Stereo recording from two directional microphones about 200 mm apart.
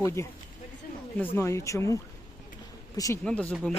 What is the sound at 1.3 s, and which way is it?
Speech, 15° left (ahead or behind).